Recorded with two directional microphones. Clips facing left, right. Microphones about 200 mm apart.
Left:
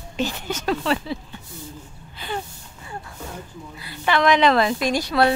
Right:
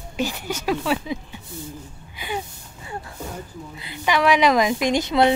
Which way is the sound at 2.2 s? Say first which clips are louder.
Right 1 dB; 10° right (ahead or behind).